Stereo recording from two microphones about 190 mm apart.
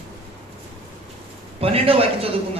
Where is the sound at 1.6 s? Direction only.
30° right (ahead or behind).